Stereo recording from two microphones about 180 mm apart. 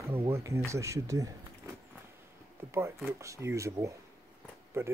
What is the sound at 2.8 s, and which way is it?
Speech, 15° right (ahead or behind).